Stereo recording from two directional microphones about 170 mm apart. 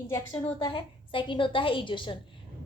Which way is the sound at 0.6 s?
30° left (ahead or behind).